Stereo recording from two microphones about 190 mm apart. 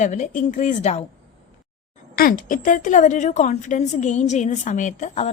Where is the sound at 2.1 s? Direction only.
50° left (ahead or behind).